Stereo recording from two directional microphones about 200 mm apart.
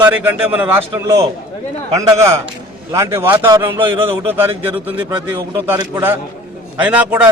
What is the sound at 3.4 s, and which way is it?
Speech, 25° right (ahead or behind).